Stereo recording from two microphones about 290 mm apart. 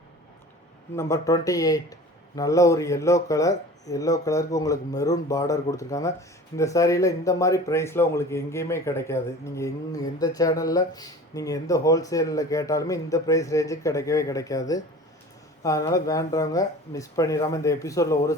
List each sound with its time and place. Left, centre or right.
0.9 s speech: centre